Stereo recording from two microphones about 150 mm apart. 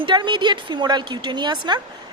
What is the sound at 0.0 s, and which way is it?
A woman's voice, 30° right (ahead or behind).